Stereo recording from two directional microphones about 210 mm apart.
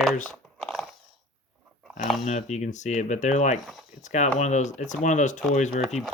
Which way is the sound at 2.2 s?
35° left (ahead or behind).